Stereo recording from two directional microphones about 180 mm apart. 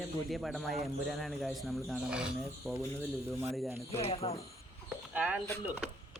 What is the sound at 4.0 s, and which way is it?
Speech, 35° left (ahead or behind).